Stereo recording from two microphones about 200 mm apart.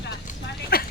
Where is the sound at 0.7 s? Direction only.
50° left (ahead or behind).